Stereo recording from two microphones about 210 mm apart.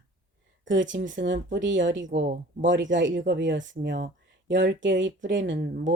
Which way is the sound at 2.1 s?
45° right (ahead or behind).